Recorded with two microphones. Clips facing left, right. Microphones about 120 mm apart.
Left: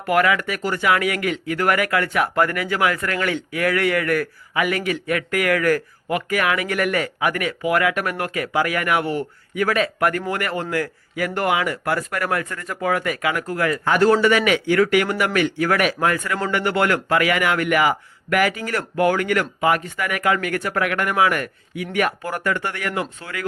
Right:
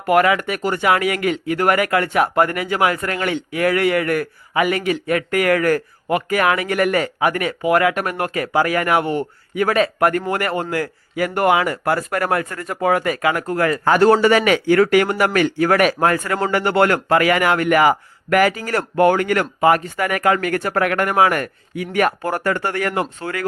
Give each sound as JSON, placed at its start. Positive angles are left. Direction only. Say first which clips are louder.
{"t": 0.0, "sound": "speech", "louder": "right 3 dB", "side_deg": -30}